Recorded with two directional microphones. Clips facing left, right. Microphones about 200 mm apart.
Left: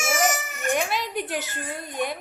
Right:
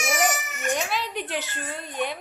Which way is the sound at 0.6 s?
15° left (ahead or behind).